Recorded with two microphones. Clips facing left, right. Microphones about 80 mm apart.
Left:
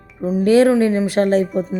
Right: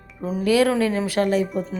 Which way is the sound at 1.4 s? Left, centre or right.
Centre.